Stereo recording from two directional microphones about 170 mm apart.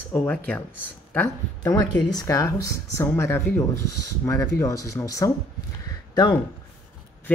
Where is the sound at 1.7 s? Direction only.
25° left (ahead or behind).